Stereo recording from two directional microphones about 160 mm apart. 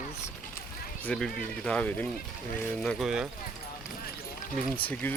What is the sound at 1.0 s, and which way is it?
Speech, 5° left (ahead or behind).